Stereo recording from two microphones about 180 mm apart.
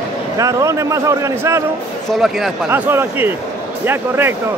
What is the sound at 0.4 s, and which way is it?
Speech, 15° right (ahead or behind).